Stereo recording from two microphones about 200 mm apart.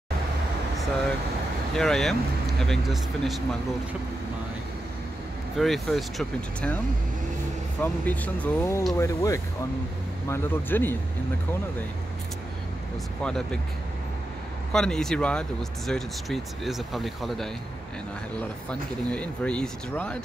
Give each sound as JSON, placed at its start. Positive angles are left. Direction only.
{"t": 1.8, "sound": "speech", "side_deg": 0}
{"t": 5.6, "sound": "speech", "side_deg": 0}
{"t": 7.8, "sound": "speech", "side_deg": 10}
{"t": 13.2, "sound": "speech", "side_deg": 5}
{"t": 14.7, "sound": "speech", "side_deg": 5}
{"t": 18.7, "sound": "speech", "side_deg": 5}